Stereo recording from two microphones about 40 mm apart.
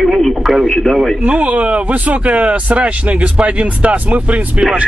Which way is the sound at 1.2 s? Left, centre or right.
Right.